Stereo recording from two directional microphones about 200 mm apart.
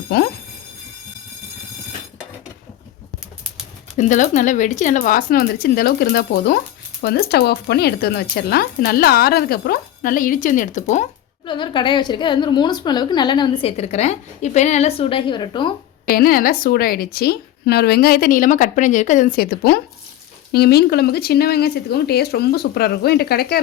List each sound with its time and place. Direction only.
0.1 s speech: 55° left (ahead or behind)
3.9 s speech: 40° left (ahead or behind)
11.4 s a woman's voice: 25° left (ahead or behind)
16.0 s speech: 45° left (ahead or behind)